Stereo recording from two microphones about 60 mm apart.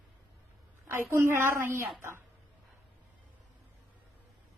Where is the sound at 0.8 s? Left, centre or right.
Right.